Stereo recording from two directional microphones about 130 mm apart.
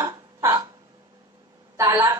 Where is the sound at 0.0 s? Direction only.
25° right (ahead or behind).